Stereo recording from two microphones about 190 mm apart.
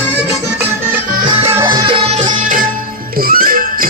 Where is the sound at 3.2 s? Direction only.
50° right (ahead or behind).